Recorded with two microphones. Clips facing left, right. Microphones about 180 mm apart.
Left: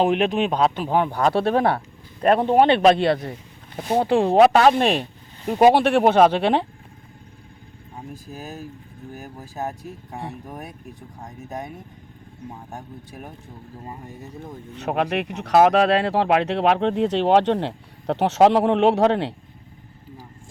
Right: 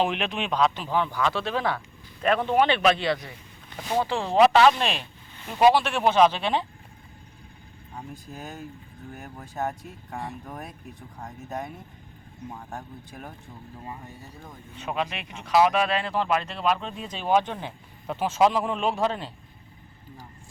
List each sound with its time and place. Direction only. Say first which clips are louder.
0.0 s speech: left 7 dB; 45° left (ahead or behind)
2.4 s speech: left 6 dB; 40° left (ahead or behind)
3.0 s speech: left 7 dB; 55° left (ahead or behind)
8.1 s speech: left 5 dB; 5° left (ahead or behind)
13.1 s speech: left 3 dB; centre (ahead or behind)
14.8 s speech: left 7 dB; 65° left (ahead or behind)